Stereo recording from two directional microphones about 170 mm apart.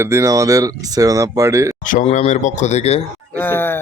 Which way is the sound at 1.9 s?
45° left (ahead or behind).